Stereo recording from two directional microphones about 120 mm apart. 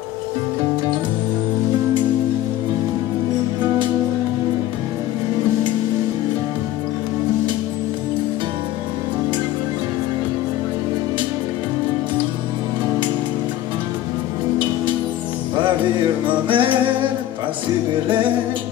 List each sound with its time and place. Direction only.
16.4 s music: 45° right (ahead or behind)
18.0 s music: 45° right (ahead or behind)